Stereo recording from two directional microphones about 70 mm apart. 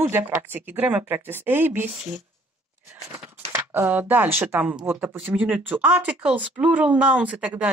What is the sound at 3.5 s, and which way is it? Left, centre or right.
Speech, right.